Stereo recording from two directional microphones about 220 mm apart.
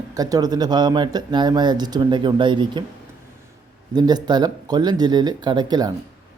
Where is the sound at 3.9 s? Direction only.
20° right (ahead or behind).